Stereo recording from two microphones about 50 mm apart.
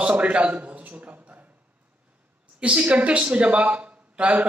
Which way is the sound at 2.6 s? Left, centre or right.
Right.